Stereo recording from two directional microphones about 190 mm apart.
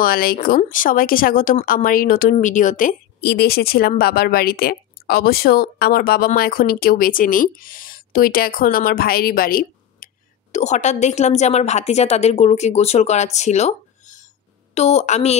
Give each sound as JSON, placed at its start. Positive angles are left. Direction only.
{"t": 0.0, "sound": "speech", "side_deg": 50}
{"t": 10.5, "sound": "a woman's voice", "side_deg": 40}